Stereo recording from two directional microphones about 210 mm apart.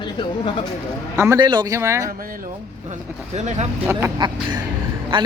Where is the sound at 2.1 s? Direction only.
45° right (ahead or behind).